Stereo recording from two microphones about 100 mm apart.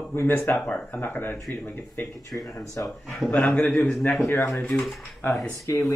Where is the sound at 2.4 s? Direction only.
35° left (ahead or behind).